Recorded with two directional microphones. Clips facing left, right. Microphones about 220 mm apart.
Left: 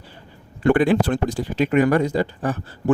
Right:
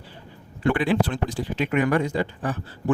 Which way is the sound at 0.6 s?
45° left (ahead or behind).